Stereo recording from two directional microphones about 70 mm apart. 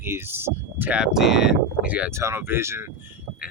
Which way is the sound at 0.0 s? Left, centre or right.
Right.